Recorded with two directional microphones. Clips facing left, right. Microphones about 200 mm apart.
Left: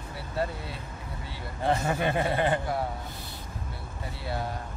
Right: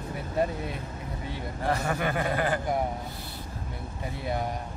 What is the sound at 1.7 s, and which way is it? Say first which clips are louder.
Speech: left 2 dB; 25° left (ahead or behind).